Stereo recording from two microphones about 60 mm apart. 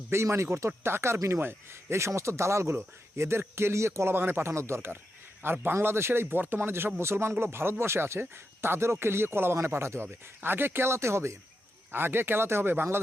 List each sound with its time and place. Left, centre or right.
0.1 s a man's voice: right
11.9 s a man's voice: right